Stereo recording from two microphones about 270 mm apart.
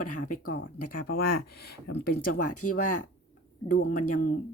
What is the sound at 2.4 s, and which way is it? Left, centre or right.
Speech, left.